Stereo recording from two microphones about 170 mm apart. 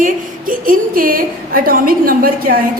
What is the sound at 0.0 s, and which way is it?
A woman's voice, 55° right (ahead or behind).